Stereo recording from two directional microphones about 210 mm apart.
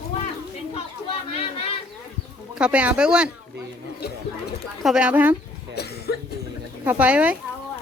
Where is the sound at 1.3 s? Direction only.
25° left (ahead or behind).